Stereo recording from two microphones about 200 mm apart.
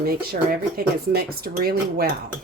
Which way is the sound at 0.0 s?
50° right (ahead or behind).